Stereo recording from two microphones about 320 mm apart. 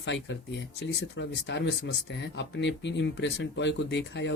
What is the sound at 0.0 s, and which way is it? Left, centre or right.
Speech, left.